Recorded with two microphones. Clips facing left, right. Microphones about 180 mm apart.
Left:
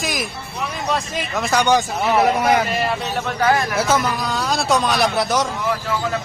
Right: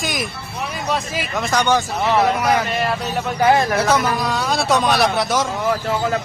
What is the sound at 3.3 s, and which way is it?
Speech, 20° right (ahead or behind).